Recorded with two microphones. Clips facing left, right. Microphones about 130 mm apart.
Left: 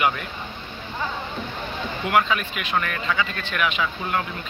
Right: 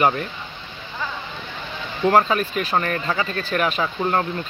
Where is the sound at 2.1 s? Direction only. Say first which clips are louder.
Right 5 dB; 35° right (ahead or behind).